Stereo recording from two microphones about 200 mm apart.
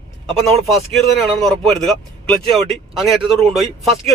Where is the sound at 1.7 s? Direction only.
Centre (ahead or behind).